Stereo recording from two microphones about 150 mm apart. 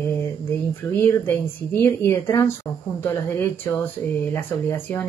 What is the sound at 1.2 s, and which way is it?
Speech, 15° left (ahead or behind).